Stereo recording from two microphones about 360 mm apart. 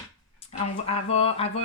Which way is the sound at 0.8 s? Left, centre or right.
Centre.